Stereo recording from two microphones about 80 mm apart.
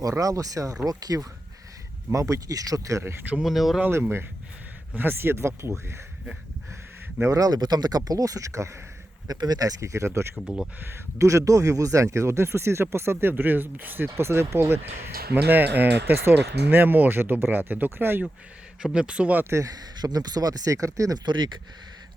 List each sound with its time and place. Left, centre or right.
0.0 s speech: right
3.4 s speech: centre
3.9 s speech: right
7.2 s speech: right
9.2 s speech: right
10.4 s speech: centre
11.2 s speech: right
18.8 s speech: centre
19.5 s speech: right
19.7 s speech: right
21.2 s speech: right